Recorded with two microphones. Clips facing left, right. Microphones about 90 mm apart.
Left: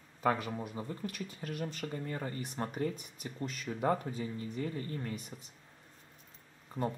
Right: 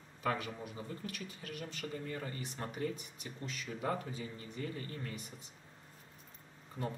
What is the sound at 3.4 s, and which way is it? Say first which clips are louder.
Speech: left 6 dB; 45° left (ahead or behind).